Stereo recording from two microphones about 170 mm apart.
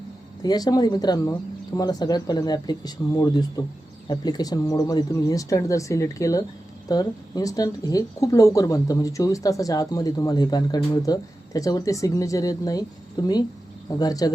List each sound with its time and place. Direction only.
0.4 s speech: 20° left (ahead or behind)